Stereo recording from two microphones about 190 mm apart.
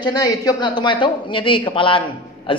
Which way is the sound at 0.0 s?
20° left (ahead or behind).